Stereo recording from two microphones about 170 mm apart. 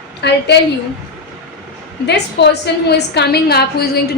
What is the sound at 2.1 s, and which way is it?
A woman's voice, 80° left.